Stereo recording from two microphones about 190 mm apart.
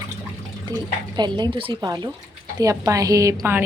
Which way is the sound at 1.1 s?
20° right (ahead or behind).